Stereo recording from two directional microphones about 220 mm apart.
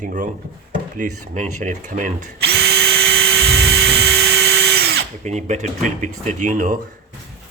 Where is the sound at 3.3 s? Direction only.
45° right (ahead or behind).